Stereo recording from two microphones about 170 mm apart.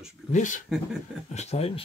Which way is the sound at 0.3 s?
50° left (ahead or behind).